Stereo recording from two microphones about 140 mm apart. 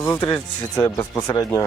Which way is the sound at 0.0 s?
25° left (ahead or behind).